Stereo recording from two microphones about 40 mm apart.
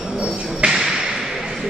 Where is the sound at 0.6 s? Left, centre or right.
Right.